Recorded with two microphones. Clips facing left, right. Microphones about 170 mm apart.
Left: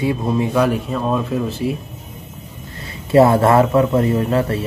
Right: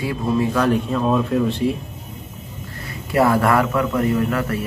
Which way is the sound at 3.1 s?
25° left (ahead or behind).